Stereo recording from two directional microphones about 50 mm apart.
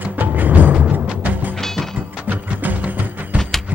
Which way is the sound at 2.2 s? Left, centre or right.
Right.